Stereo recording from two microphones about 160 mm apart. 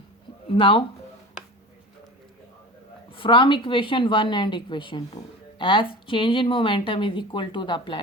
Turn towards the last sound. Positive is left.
turn(degrees=30)  # may be behind; listen again after turning